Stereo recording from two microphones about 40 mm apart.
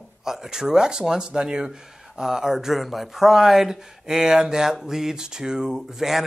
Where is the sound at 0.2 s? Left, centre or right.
Centre.